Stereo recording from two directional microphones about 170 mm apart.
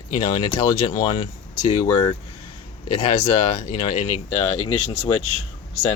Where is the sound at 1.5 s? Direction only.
25° left (ahead or behind).